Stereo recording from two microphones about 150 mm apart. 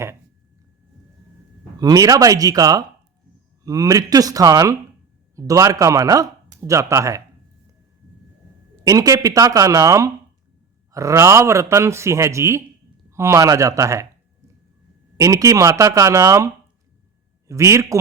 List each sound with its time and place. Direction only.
1.8 s speech: 25° right (ahead or behind)
8.8 s speech: 25° right (ahead or behind)
15.2 s speech: 20° right (ahead or behind)
17.5 s speech: 20° right (ahead or behind)